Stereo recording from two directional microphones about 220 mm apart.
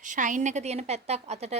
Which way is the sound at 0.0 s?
35° right (ahead or behind).